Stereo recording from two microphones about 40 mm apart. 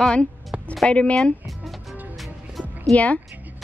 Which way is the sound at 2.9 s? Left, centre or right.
Left.